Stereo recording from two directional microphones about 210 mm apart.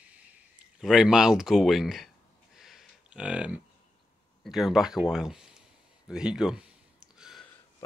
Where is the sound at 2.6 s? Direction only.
Centre (ahead or behind).